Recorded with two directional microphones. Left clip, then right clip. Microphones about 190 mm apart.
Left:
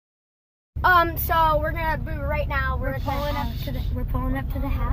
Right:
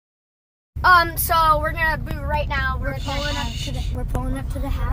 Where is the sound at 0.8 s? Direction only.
10° left (ahead or behind).